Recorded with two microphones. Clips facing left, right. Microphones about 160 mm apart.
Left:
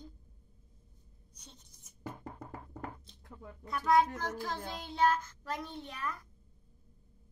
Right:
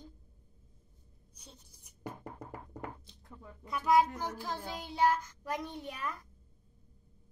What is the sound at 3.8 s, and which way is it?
Child singing, 10° right (ahead or behind).